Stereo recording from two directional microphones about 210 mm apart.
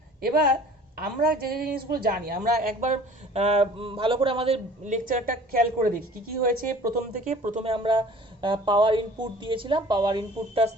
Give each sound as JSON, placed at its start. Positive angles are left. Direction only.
{"t": 0.2, "sound": "a woman's voice", "side_deg": -45}